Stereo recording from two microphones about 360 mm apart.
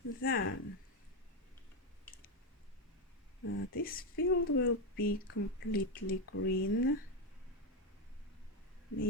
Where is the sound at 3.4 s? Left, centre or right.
Left.